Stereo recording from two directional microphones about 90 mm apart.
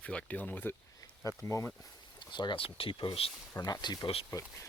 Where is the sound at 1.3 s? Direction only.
35° left (ahead or behind).